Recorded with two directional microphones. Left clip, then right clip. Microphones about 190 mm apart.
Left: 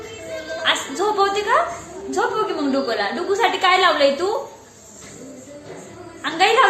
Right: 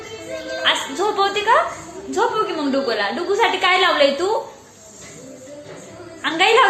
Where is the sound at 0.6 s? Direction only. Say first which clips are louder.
Right 1 dB; 25° right (ahead or behind).